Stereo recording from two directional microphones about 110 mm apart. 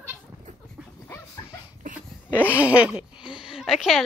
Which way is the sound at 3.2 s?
45° left (ahead or behind).